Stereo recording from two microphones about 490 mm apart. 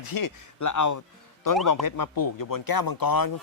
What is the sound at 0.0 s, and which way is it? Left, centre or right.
Speech, left.